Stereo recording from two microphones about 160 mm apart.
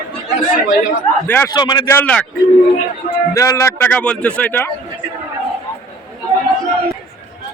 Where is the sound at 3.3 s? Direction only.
20° left (ahead or behind).